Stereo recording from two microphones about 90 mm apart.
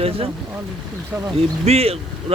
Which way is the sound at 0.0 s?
90° right.